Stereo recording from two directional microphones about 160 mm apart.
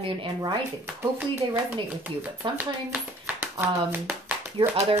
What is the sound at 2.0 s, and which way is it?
Speech, 10° right (ahead or behind).